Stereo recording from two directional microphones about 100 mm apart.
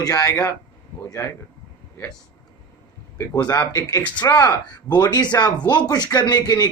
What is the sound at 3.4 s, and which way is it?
Speech, 35° left (ahead or behind).